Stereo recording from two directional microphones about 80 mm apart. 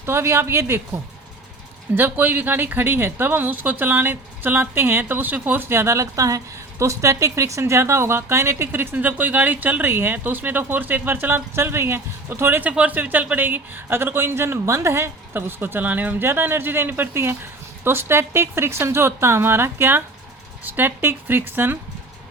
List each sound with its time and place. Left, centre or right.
0.0 s a woman's voice: right
2.0 s a woman's voice: right